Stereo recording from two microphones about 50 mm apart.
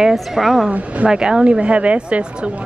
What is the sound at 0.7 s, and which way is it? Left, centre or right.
Speech, right.